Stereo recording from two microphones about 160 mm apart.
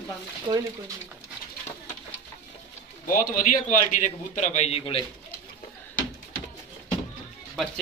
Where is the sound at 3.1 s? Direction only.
60° left (ahead or behind); by 5.0 s 35° left (ahead or behind).